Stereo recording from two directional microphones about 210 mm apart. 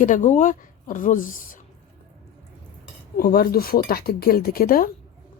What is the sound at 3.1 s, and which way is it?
Speech, 45° left (ahead or behind).